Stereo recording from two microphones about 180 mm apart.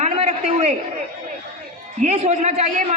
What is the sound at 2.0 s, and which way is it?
Speech, 35° right (ahead or behind).